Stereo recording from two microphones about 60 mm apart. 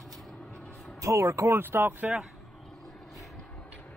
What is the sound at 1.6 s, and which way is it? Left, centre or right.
Speech, right.